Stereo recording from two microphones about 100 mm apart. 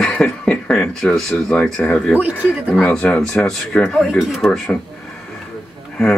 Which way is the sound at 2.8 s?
10° left (ahead or behind).